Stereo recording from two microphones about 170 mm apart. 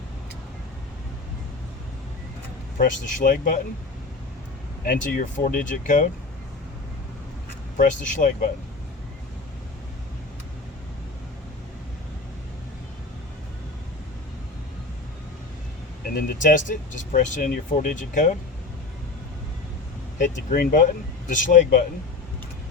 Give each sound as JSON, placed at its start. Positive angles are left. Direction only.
{"t": 2.7, "sound": "speech", "side_deg": 50}
{"t": 4.9, "sound": "speech", "side_deg": 55}
{"t": 7.8, "sound": "speech", "side_deg": 50}
{"t": 16.0, "sound": "speech", "side_deg": 55}
{"t": 20.1, "sound": "speech", "side_deg": 50}